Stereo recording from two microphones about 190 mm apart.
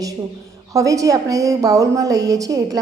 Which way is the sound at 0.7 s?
15° right (ahead or behind).